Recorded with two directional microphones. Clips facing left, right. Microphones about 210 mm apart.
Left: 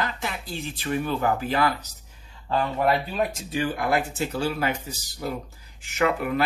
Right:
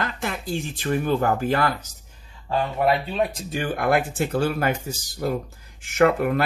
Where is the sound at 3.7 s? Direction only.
55° right (ahead or behind).